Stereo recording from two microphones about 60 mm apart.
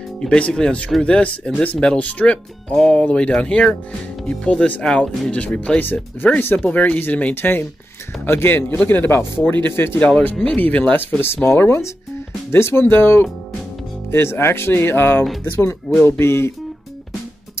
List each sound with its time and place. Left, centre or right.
0.2 s speech: centre
5.8 s speech: left
9.9 s speech: centre
11.0 s speech: left